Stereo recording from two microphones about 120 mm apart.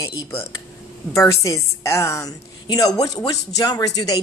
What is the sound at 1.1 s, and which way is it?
A woman's voice, 25° left (ahead or behind).